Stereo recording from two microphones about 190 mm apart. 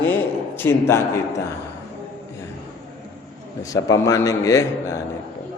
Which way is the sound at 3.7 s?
15° left (ahead or behind).